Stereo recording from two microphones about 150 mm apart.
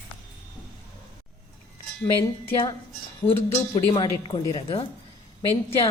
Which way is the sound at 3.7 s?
35° left (ahead or behind).